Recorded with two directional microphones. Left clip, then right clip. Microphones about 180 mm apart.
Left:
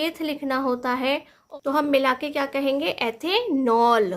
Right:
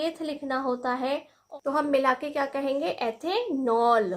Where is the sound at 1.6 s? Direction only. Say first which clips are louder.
Left 3 dB; 35° left (ahead or behind).